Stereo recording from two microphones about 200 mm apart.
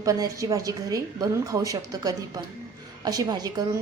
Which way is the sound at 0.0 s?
15° right (ahead or behind).